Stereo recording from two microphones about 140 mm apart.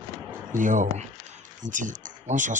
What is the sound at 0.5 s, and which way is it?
Speech, 65° right (ahead or behind).